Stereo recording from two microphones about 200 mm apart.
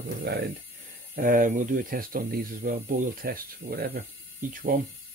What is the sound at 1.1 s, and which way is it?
Speech, 45° right (ahead or behind).